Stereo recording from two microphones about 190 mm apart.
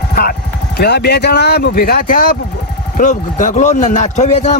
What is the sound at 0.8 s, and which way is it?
A man's voice, 60° left (ahead or behind).